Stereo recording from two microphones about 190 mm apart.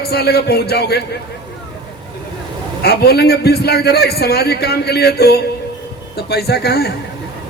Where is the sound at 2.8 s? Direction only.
55° left (ahead or behind).